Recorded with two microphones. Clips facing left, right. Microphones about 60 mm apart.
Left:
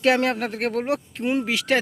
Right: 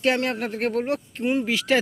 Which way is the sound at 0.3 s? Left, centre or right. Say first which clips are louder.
Left 1 dB; left.